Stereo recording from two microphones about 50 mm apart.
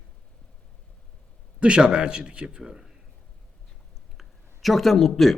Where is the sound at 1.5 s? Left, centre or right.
Centre.